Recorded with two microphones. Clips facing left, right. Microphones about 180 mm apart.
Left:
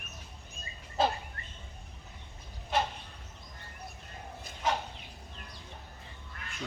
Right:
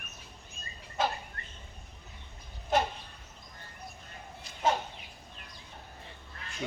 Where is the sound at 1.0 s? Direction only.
30° left (ahead or behind).